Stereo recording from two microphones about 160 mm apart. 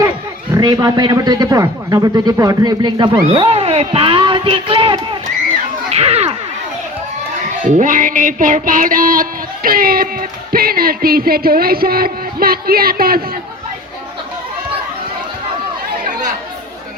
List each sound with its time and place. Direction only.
0.5 s speech: 25° right (ahead or behind)
3.3 s speech: 35° right (ahead or behind)
5.9 s a sound: 40° right (ahead or behind)
7.6 s music: 50° right (ahead or behind); by 13.2 s 70° right (ahead or behind)